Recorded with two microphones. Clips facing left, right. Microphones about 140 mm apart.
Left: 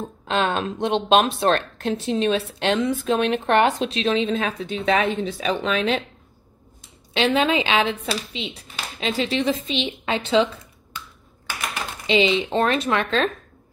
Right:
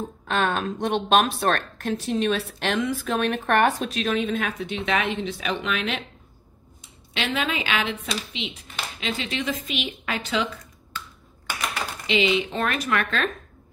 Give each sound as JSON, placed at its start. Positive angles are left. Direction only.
{"t": 0.3, "sound": "a woman's voice", "side_deg": 20}
{"t": 7.2, "sound": "a woman's voice", "side_deg": 30}
{"t": 12.1, "sound": "a woman's voice", "side_deg": 30}